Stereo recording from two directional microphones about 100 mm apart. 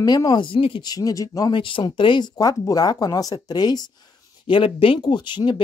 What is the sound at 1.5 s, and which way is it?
Speech, 55° left (ahead or behind).